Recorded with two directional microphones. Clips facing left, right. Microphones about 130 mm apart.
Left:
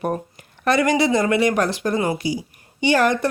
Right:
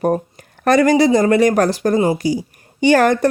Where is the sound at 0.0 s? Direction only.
40° right (ahead or behind).